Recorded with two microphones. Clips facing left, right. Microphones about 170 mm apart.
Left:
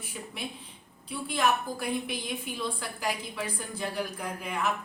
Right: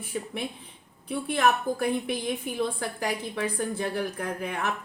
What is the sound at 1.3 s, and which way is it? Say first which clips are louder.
A woman's voice: right 3 dB; 60° right (ahead or behind).